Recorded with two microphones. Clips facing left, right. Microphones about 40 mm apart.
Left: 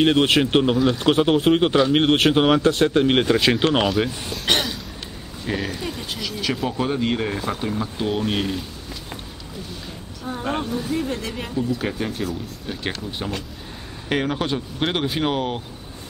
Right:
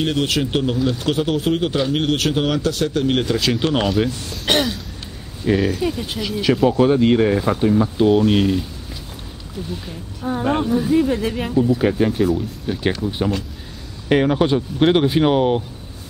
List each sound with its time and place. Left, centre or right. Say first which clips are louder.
0.0 s speech: left 3 dB; left
4.5 s throat clearing: right 3 dB; centre
5.4 s speech: right 8 dB; centre
10.2 s speech: right 6 dB; centre
14.0 s speech: right 7 dB; centre